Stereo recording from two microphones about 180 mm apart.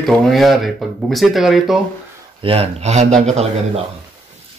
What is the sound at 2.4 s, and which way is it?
Speech, 35° right (ahead or behind).